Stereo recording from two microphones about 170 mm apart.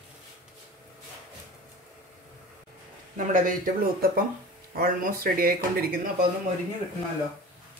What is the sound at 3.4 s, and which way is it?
Speech, 60° right (ahead or behind).